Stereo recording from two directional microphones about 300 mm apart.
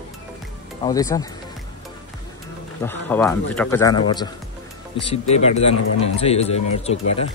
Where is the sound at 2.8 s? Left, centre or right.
Centre.